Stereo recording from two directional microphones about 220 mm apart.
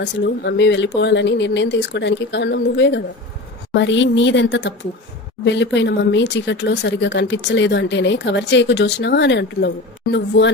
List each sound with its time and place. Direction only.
0.0 s a woman's voice: 50° left (ahead or behind)